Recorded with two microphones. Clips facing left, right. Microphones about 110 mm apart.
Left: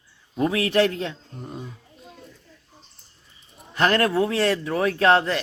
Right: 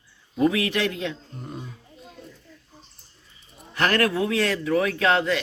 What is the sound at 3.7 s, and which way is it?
A man's voice, 25° left (ahead or behind).